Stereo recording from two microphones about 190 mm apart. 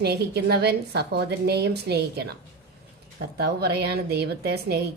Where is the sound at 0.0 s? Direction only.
60° right (ahead or behind).